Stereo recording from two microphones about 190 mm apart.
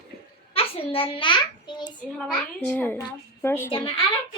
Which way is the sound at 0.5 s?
30° left (ahead or behind).